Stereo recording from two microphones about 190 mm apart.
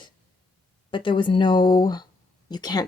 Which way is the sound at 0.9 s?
25° left (ahead or behind).